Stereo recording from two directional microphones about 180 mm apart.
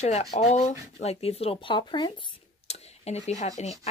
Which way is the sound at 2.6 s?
35° left (ahead or behind).